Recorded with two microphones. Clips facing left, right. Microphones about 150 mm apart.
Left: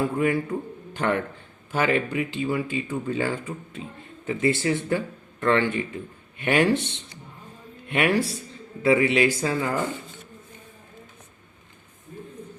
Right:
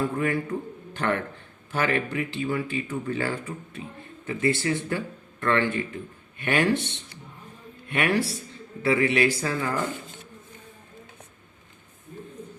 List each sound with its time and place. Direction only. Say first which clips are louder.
0.0 s speech: left 3 dB; 15° left (ahead or behind)